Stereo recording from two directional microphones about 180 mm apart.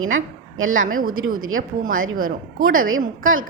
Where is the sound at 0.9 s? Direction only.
50° right (ahead or behind).